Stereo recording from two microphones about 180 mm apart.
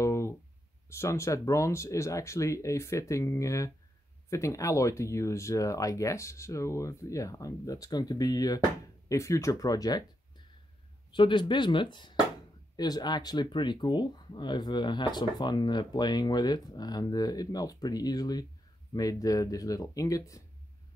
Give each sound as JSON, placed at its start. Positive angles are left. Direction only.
{"t": 0.0, "sound": "a sound", "side_deg": 15}
{"t": 0.8, "sound": "speech", "side_deg": 15}
{"t": 11.1, "sound": "speech", "side_deg": 25}